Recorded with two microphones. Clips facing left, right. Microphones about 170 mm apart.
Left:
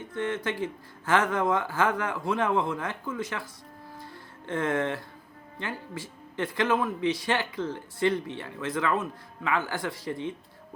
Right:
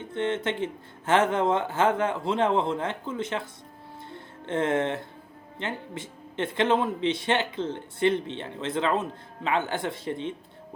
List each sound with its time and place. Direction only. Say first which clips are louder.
0.0 s speech: right 3 dB; 25° right (ahead or behind)
4.1 s music: right 3 dB; 25° right (ahead or behind)
5.5 s speech: right 2 dB; 25° right (ahead or behind)